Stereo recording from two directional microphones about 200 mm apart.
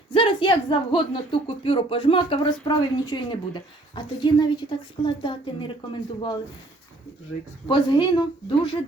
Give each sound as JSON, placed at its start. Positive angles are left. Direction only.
{"t": 0.1, "sound": "a woman's voice", "side_deg": 25}
{"t": 7.7, "sound": "a woman's voice", "side_deg": 20}